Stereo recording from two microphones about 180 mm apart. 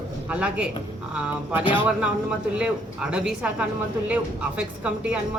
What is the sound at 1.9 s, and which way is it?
Speech, 5° right (ahead or behind).